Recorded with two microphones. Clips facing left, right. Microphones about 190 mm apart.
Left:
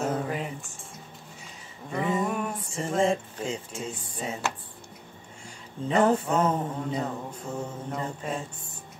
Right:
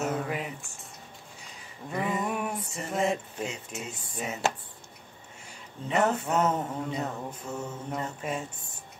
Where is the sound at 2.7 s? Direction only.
30° left (ahead or behind).